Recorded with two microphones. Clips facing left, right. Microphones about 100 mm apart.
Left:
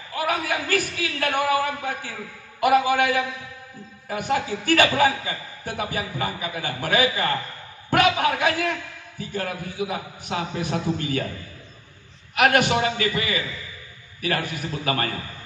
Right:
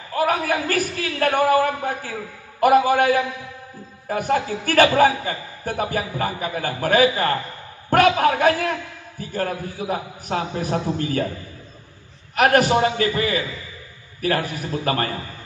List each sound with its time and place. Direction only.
0.1 s a man's voice: 40° right (ahead or behind)
12.4 s a man's voice: 35° right (ahead or behind)